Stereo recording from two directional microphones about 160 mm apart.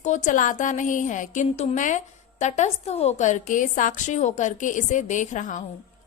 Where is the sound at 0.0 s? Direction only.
50° left (ahead or behind).